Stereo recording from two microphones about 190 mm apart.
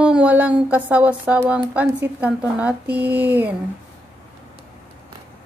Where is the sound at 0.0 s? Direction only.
5° right (ahead or behind).